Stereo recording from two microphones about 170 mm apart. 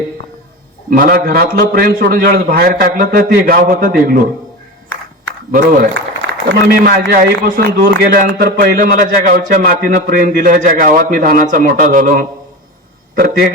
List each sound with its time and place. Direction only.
0.9 s a man's voice: 60° right (ahead or behind)
5.2 s a sound: 55° right (ahead or behind)
5.9 s a man's voice: 90° right; by 13.5 s 65° right (ahead or behind)